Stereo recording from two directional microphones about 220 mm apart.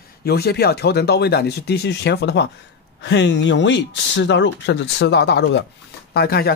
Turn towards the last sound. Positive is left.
turn(degrees=45)  # may be behind; listen again after turning